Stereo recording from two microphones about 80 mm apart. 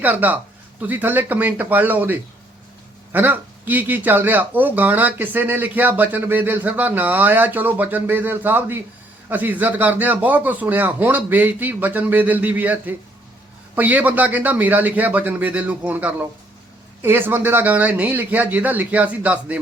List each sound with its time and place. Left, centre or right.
0.0 s speech: right